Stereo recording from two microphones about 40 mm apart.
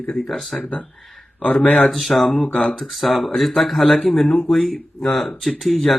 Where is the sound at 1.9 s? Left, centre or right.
Centre.